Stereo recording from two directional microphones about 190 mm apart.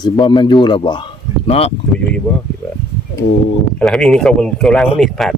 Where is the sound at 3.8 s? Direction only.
Centre (ahead or behind).